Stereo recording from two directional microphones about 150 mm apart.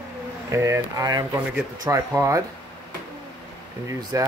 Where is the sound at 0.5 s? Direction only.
20° right (ahead or behind).